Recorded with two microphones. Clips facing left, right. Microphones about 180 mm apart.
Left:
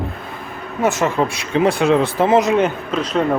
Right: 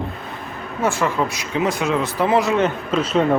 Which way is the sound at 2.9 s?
Centre (ahead or behind).